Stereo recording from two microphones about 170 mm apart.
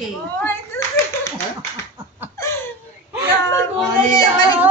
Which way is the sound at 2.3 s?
15° left (ahead or behind).